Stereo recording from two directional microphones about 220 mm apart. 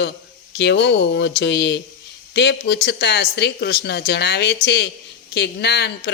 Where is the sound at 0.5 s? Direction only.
50° left (ahead or behind).